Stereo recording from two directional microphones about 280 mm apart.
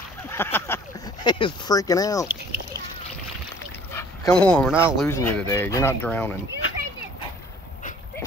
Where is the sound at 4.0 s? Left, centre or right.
Centre.